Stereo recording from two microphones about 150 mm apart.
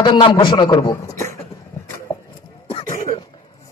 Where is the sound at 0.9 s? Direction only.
20° left (ahead or behind).